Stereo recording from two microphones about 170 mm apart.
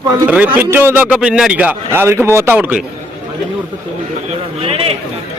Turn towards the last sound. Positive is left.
turn(degrees=-35)  # may be behind; listen again after turning